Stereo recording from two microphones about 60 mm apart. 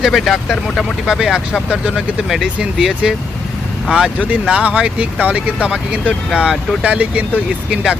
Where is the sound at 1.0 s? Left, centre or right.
Centre.